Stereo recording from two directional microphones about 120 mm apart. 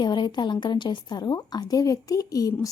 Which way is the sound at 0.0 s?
40° left (ahead or behind).